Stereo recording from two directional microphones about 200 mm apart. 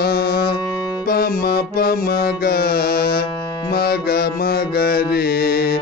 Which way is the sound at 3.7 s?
50° left (ahead or behind).